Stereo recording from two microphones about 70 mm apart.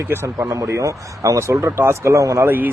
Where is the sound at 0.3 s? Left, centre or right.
Right.